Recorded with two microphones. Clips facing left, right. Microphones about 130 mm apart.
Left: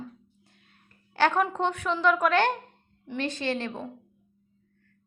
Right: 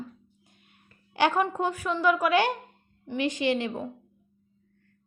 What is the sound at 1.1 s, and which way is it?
A woman's voice, 15° right (ahead or behind).